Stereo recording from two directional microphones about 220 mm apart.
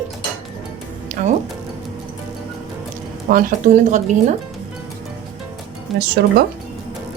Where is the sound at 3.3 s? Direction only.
35° right (ahead or behind).